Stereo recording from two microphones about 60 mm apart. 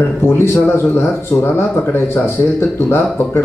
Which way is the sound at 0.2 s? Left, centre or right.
Left.